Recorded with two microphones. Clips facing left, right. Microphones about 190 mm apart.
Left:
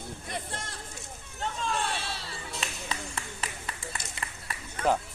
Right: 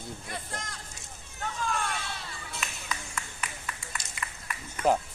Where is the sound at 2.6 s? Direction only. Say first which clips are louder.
Left 1 dB; 30° left (ahead or behind).